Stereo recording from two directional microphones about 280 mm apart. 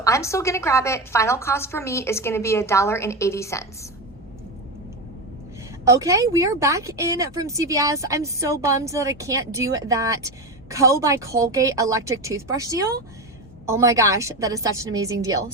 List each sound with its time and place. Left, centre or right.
0.0 s a woman's voice: centre
5.8 s speech: centre